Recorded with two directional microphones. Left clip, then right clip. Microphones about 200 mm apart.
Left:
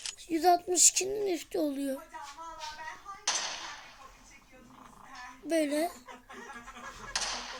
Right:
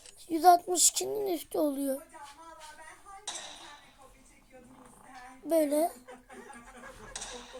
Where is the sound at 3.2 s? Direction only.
20° left (ahead or behind).